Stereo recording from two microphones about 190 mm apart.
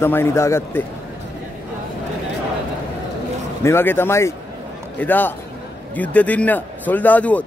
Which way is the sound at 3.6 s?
10° left (ahead or behind).